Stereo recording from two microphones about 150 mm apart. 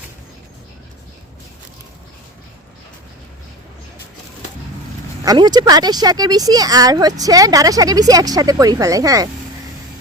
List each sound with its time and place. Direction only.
5.2 s speech: 25° right (ahead or behind)